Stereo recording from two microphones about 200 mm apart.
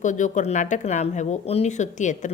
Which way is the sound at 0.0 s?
40° left (ahead or behind).